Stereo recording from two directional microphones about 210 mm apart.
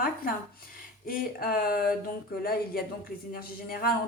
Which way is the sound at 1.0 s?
45° left (ahead or behind).